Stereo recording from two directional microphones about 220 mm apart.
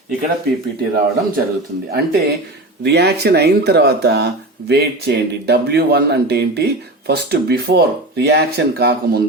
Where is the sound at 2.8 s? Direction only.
50° right (ahead or behind).